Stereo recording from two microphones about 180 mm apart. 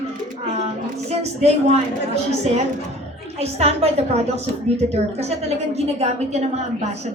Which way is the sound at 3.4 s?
35° right (ahead or behind).